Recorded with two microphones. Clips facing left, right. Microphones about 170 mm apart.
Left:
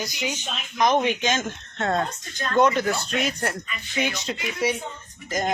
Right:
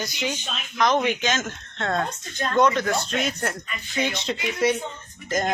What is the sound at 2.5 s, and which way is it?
Speech, 5° left (ahead or behind).